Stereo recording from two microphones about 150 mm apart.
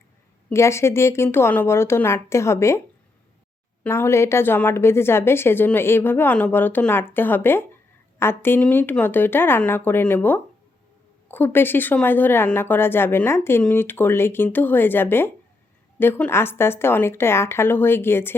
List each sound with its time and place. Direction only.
0.5 s speech: 20° left (ahead or behind)
3.8 s speech: 15° left (ahead or behind)